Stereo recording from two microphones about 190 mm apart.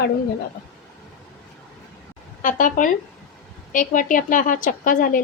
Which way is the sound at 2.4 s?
45° left (ahead or behind).